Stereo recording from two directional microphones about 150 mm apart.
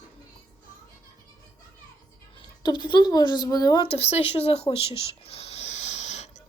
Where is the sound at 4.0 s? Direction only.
45° left (ahead or behind).